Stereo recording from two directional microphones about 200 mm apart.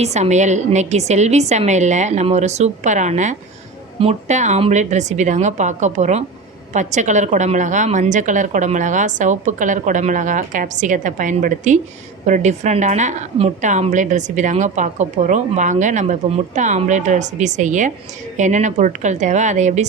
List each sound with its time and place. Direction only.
0.0 s a woman's voice: 35° right (ahead or behind)